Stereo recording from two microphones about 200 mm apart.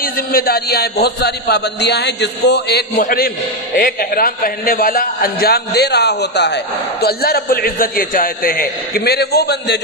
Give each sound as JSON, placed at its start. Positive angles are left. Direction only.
{"t": 0.0, "sound": "a man's voice", "side_deg": 50}